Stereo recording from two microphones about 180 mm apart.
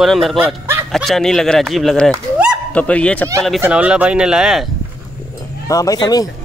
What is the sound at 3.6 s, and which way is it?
Speech, 5° right (ahead or behind).